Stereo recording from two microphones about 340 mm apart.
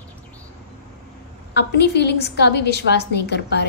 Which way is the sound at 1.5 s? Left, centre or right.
Left.